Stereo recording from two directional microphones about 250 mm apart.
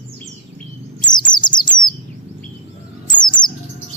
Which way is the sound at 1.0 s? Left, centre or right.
Centre.